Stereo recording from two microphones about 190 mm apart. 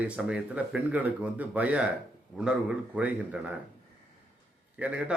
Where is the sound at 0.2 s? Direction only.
5° right (ahead or behind).